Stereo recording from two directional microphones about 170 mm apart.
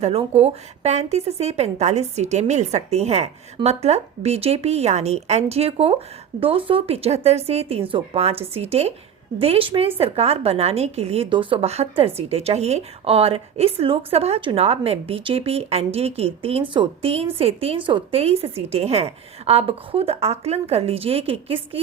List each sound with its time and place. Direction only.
0.0 s a woman's voice: 35° right (ahead or behind)